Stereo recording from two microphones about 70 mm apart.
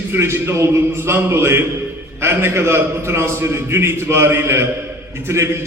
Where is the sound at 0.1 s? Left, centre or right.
Right.